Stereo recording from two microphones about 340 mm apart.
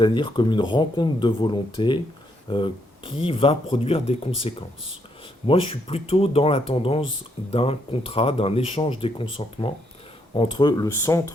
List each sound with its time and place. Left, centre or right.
0.0 s speech: centre